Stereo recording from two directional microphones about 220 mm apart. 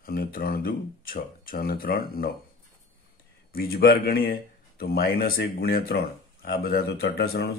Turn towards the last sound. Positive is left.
turn(degrees=45)  # may be behind; listen again after turning